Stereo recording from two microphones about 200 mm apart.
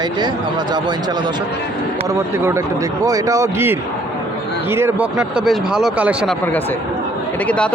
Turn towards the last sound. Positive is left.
turn(degrees=5)  # may be behind; listen again after turning